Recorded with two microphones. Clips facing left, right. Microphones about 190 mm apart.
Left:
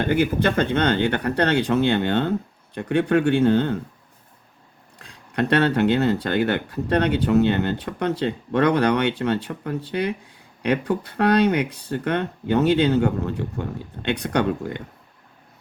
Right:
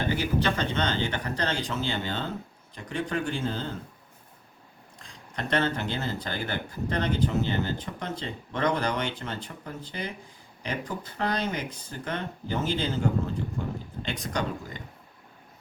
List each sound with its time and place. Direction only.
0.0 s speech: 55° left (ahead or behind)
4.9 s speech: 65° left (ahead or behind)